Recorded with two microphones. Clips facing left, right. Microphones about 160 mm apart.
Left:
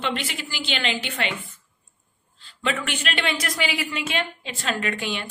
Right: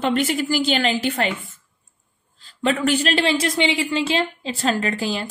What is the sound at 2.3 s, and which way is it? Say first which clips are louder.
A woman's voice: right 5 dB; 40° right (ahead or behind).